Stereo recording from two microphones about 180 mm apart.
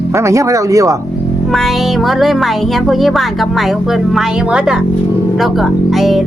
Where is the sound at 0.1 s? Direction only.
15° right (ahead or behind).